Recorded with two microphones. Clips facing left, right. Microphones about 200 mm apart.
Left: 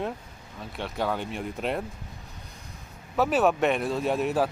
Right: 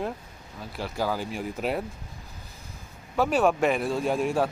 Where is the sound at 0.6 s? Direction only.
Centre (ahead or behind).